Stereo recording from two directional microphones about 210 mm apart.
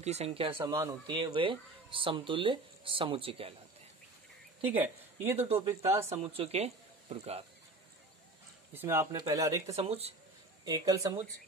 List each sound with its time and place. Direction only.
0.0 s a man's voice: 30° right (ahead or behind)
0.6 s a man's voice: 15° right (ahead or behind)
4.6 s speech: 10° right (ahead or behind)
6.2 s speech: 30° right (ahead or behind)
8.7 s speech: 10° right (ahead or behind)
9.7 s a man's voice: 30° right (ahead or behind)
10.6 s a man's voice: 15° right (ahead or behind)